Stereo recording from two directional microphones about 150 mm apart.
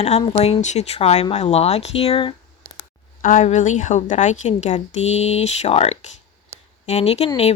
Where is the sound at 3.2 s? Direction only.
60° left (ahead or behind).